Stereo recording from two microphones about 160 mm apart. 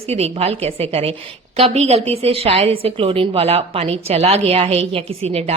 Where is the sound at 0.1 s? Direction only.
40° right (ahead or behind).